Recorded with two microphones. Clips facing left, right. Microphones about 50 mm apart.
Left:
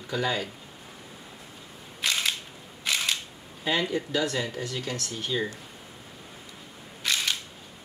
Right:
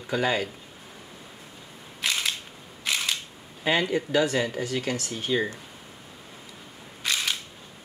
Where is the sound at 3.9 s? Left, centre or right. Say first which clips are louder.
Right 4 dB; right.